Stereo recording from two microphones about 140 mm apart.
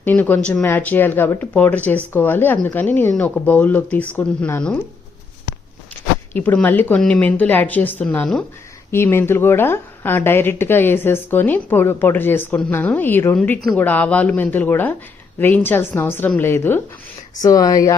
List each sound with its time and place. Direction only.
0.0 s a woman's voice: 10° left (ahead or behind)
6.3 s a woman's voice: 10° left (ahead or behind)
8.9 s a woman's voice: 15° left (ahead or behind)
17.4 s speech: 25° left (ahead or behind)